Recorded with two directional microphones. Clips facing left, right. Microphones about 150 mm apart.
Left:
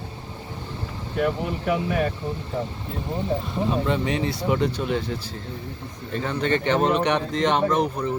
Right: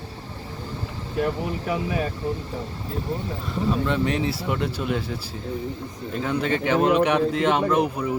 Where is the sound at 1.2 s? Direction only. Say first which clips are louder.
Left 2 dB; 35° right (ahead or behind).